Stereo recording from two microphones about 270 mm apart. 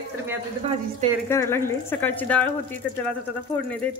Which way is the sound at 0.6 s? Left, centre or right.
Right.